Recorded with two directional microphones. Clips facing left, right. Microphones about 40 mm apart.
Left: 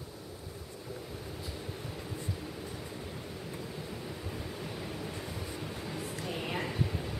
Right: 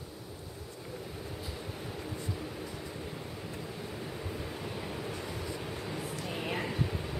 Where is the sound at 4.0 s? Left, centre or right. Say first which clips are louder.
Right 1 dB; centre.